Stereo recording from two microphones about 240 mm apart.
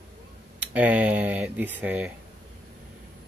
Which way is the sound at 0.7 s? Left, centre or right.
Centre.